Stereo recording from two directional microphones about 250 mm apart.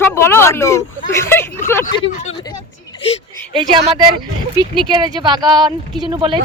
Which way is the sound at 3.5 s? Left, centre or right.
Centre.